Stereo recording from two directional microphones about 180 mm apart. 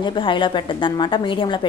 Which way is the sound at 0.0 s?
25° left (ahead or behind).